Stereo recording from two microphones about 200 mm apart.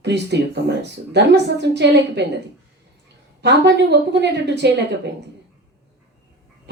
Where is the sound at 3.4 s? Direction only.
60° right (ahead or behind).